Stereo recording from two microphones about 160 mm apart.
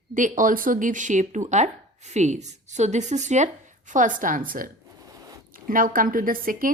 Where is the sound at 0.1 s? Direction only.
55° right (ahead or behind).